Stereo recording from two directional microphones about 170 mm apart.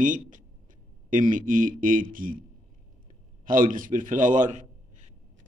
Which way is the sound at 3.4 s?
50° right (ahead or behind).